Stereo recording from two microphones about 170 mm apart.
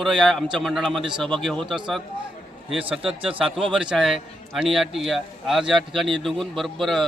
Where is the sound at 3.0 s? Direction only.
30° right (ahead or behind).